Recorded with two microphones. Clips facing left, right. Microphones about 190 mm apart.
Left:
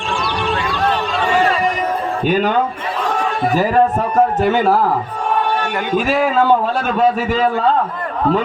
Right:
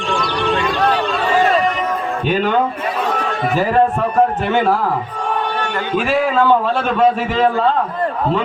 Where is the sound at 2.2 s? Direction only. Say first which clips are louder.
Left 2 dB; 40° left (ahead or behind).